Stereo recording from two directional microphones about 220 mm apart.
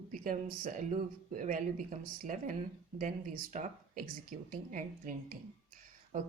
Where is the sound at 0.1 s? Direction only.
40° right (ahead or behind).